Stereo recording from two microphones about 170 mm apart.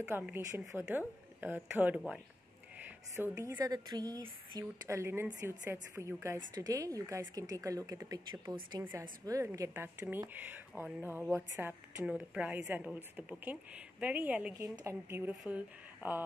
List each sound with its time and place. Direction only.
0.0 s a woman's voice: 10° right (ahead or behind)
3.2 s a woman's voice: 15° right (ahead or behind)